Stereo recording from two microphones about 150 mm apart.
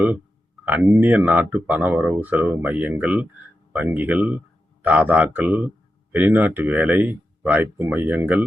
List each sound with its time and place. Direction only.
0.6 s speech: 10° right (ahead or behind)